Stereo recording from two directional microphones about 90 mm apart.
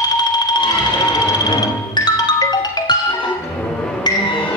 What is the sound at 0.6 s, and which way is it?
Music, 50° left (ahead or behind).